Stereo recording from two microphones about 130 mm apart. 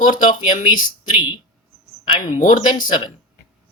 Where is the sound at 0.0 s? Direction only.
85° left.